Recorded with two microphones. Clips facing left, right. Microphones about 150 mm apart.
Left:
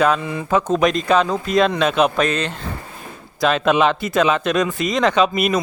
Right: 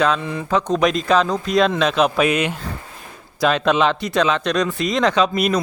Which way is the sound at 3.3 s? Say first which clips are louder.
Left 1 dB; centre (ahead or behind).